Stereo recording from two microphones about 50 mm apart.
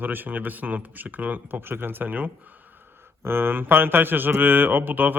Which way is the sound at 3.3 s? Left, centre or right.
Right.